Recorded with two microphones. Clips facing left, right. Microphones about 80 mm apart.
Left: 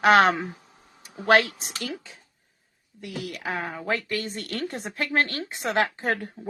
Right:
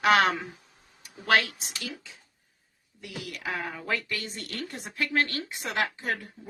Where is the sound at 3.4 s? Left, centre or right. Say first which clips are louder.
Left 2 dB; left.